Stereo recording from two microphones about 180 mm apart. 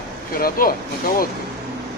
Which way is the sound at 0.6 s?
55° left (ahead or behind).